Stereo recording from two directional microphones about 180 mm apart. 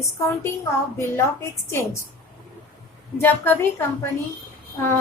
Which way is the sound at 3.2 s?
10° left (ahead or behind).